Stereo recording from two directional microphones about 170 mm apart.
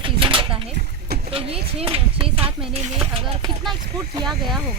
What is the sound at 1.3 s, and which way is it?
Speech, 35° right (ahead or behind).